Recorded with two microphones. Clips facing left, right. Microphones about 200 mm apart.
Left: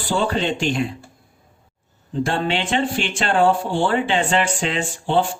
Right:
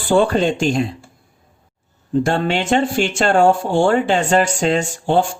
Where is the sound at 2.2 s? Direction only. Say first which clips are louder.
Right 2 dB; 45° right (ahead or behind).